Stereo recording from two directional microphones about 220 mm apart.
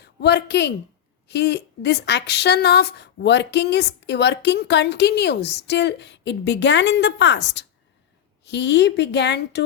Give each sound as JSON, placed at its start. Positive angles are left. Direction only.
{"t": 0.0, "sound": "a woman's voice", "side_deg": 50}